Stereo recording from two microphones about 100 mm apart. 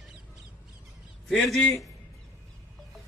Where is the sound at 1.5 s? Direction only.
Centre (ahead or behind).